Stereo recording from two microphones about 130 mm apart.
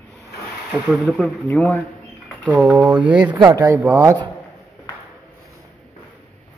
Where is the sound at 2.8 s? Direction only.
10° right (ahead or behind).